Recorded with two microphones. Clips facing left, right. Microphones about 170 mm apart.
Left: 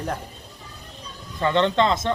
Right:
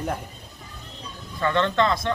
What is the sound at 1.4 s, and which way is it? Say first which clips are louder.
Speech: left 2 dB; 20° left (ahead or behind).